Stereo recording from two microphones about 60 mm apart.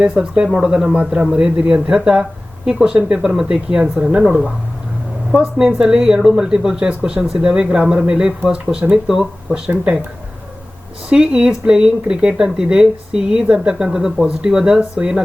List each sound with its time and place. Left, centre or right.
0.0 s speech: centre
5.5 s speech: centre
11.1 s speech: centre